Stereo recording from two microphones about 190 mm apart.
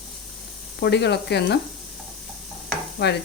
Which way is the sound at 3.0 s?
60° left (ahead or behind).